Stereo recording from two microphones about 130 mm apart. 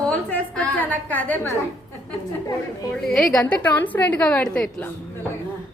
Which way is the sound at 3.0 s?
Centre (ahead or behind).